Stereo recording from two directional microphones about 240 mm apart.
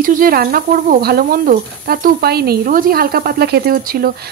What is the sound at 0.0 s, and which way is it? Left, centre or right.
Speech, right.